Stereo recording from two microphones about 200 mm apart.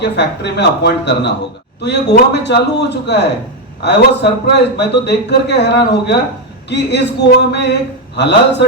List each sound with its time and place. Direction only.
0.0 s a man's voice: 60° left (ahead or behind)